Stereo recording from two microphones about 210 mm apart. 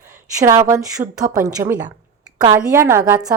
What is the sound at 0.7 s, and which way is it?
A woman's voice, 15° right (ahead or behind).